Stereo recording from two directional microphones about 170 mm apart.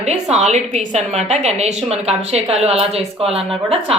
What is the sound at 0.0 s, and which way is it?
A woman's voice, 40° right (ahead or behind).